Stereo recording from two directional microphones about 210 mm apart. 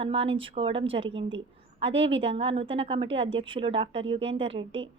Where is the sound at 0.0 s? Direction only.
25° right (ahead or behind).